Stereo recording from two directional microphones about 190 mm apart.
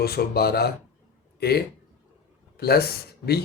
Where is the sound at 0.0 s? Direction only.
55° left (ahead or behind).